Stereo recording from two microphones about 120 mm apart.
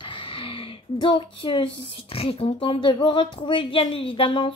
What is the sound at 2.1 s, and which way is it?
Speech, 50° left (ahead or behind).